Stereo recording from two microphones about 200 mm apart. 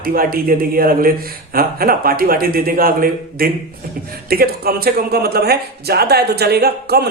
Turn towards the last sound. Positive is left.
turn(degrees=-50)  # may be behind; listen again after turning